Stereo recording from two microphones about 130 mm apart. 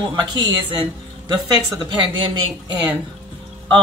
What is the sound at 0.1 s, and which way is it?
A man's voice, 35° right (ahead or behind).